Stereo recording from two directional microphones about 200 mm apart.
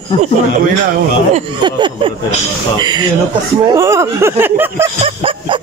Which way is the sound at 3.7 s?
15° right (ahead or behind).